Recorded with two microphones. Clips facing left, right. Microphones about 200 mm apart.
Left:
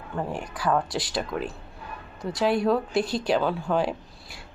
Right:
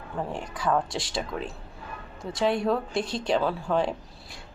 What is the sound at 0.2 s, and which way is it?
A woman's voice, centre (ahead or behind).